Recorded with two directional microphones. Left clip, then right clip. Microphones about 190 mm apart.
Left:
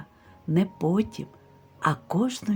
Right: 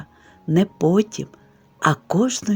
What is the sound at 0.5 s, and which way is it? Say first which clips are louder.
Speech: right 8 dB; 40° right (ahead or behind).